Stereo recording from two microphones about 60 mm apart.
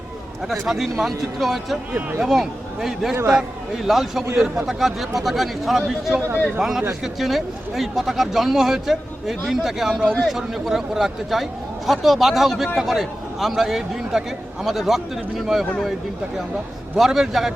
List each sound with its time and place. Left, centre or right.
0.7 s a man's voice: centre
1.9 s speech: right
2.2 s a man's voice: centre
17.0 s a man's voice: centre